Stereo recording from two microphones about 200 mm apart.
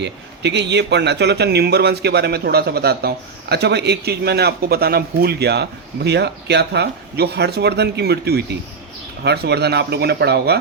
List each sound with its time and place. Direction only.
0.0 s speech: 60° right (ahead or behind)